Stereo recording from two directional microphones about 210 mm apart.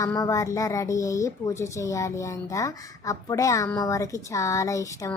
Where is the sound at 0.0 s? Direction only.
15° left (ahead or behind).